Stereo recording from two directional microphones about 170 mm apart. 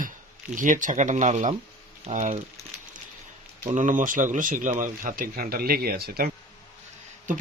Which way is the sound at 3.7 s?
50° right (ahead or behind).